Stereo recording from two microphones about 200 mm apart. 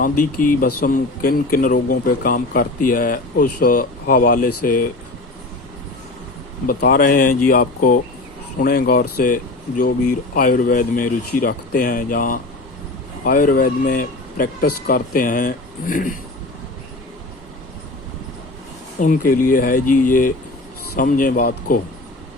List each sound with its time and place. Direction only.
0.0 s speech: 45° left (ahead or behind)
6.7 s speech: 50° left (ahead or behind)
18.9 s speech: 45° left (ahead or behind)